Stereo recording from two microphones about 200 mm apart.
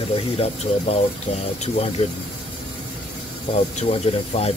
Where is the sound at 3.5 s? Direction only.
35° left (ahead or behind).